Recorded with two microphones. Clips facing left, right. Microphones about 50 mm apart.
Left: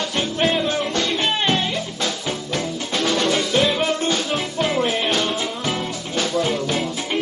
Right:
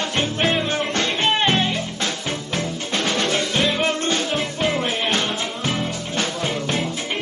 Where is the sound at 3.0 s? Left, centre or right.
Centre.